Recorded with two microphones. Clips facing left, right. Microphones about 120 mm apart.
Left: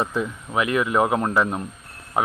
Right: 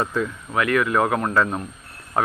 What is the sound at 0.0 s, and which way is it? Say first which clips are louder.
Speech: right 1 dB; 15° left (ahead or behind).